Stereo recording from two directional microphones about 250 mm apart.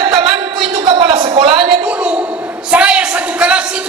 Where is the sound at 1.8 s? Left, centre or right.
Centre.